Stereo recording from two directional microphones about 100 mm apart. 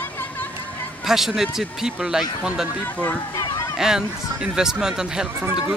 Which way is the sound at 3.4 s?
35° left (ahead or behind).